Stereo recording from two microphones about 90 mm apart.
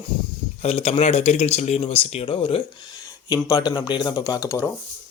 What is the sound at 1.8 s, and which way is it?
Speech, 70° left (ahead or behind).